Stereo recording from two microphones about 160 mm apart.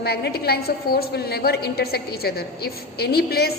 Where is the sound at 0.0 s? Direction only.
85° left.